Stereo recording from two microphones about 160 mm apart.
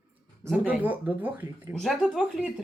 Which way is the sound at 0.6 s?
10° right (ahead or behind).